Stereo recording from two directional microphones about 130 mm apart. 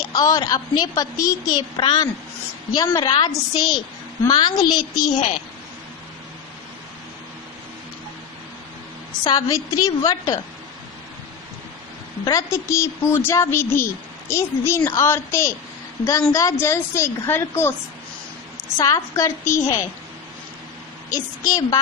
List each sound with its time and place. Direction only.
0.1 s a woman's voice: 25° left (ahead or behind)
1.8 s a woman's voice: 35° left (ahead or behind)
9.2 s a woman's voice: 30° left (ahead or behind)
12.2 s a woman's voice: 30° left (ahead or behind)
18.8 s a woman's voice: 25° left (ahead or behind)
21.1 s a woman's voice: 25° left (ahead or behind)